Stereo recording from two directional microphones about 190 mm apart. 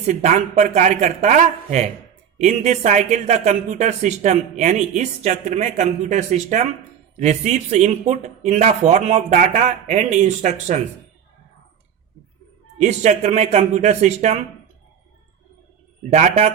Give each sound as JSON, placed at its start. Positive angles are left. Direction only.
{"t": 0.1, "sound": "speech", "side_deg": -35}
{"t": 12.8, "sound": "speech", "side_deg": -35}
{"t": 16.0, "sound": "speech", "side_deg": -35}